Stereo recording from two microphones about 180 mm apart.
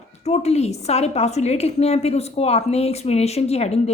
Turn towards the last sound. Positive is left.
turn(degrees=35)  # may be behind; listen again after turning